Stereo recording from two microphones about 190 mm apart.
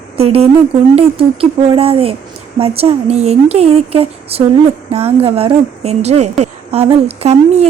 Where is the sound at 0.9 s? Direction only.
30° right (ahead or behind).